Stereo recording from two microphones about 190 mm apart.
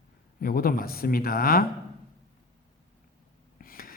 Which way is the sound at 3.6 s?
50° left (ahead or behind).